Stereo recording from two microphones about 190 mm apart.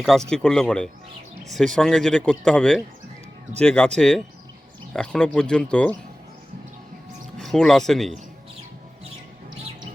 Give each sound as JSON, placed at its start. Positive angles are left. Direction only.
{"t": 0.3, "sound": "speech", "side_deg": 5}
{"t": 7.3, "sound": "speech", "side_deg": 5}